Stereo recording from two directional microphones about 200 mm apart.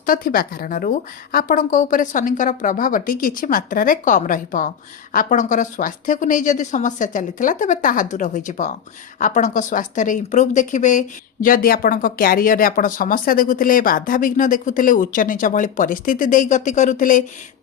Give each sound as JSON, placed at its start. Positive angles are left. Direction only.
{"t": 0.0, "sound": "speech", "side_deg": 45}